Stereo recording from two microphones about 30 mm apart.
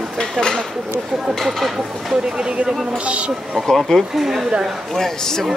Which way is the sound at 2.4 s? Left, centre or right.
Right.